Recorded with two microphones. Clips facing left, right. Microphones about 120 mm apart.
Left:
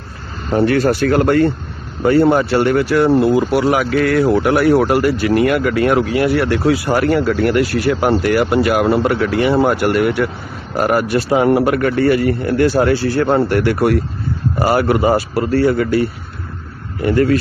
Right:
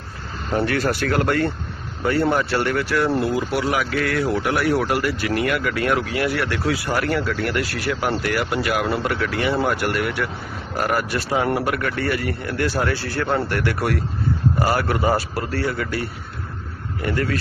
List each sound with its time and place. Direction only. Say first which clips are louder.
0.5 s speech: left 7 dB; 30° left (ahead or behind)
11.7 s speech: left 9 dB; 35° left (ahead or behind); by 15.4 s 15° left (ahead or behind)
15.5 s speech: left 11 dB; 30° left (ahead or behind)
17.0 s speech: left 10 dB; 30° left (ahead or behind)